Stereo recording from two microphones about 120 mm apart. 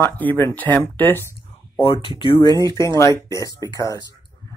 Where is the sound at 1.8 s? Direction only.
45° left (ahead or behind).